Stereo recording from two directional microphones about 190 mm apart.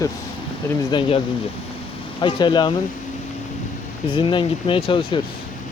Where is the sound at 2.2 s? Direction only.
25° left (ahead or behind).